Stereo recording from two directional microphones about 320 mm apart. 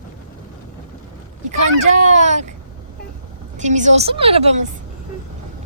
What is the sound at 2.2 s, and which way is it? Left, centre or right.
Speech, right.